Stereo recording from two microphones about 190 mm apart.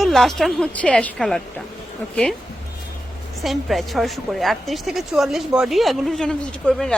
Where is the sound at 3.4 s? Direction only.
Centre (ahead or behind).